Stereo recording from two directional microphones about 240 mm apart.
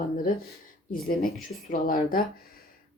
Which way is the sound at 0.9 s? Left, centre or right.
Left.